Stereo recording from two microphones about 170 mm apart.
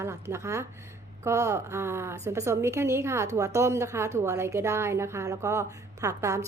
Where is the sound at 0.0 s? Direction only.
15° right (ahead or behind).